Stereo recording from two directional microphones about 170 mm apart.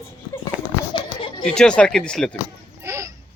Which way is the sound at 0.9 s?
30° left (ahead or behind).